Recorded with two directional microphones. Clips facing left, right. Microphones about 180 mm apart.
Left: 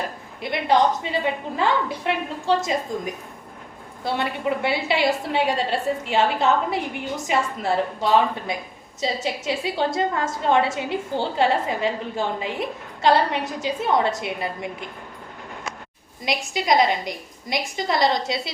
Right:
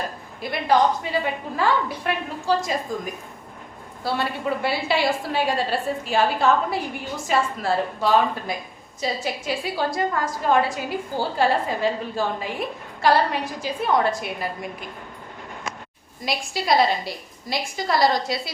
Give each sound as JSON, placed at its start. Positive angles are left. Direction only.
{"t": 0.7, "sound": "a woman's voice", "side_deg": 25}
{"t": 16.2, "sound": "a woman's voice", "side_deg": 20}